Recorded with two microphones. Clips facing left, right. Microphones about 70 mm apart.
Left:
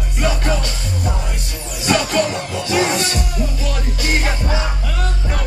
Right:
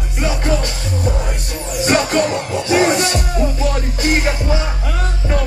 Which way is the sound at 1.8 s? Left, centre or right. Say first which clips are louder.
Right 2 dB; right.